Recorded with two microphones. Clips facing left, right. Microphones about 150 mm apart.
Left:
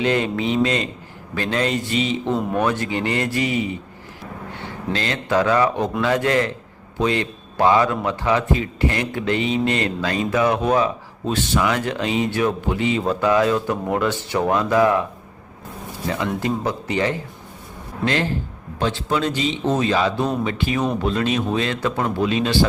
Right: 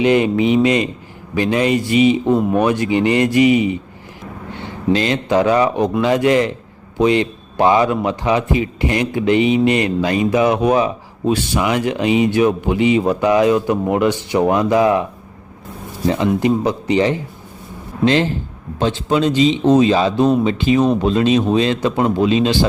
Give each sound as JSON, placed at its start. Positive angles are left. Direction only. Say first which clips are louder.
{"t": 0.0, "sound": "a man's voice", "louder": "right 7 dB", "side_deg": -15}
{"t": 4.9, "sound": "a man's voice", "louder": "right 7 dB", "side_deg": -20}
{"t": 16.0, "sound": "a man's voice", "louder": "right 7 dB", "side_deg": -20}